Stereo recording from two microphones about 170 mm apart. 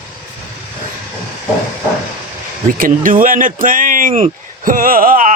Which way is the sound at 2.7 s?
55° right (ahead or behind).